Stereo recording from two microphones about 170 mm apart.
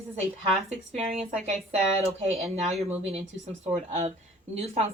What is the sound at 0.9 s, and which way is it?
Speech, 35° right (ahead or behind).